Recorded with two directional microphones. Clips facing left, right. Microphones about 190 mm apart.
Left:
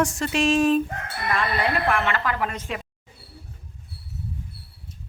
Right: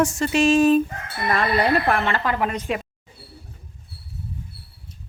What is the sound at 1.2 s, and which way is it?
A woman's voice, 40° right (ahead or behind).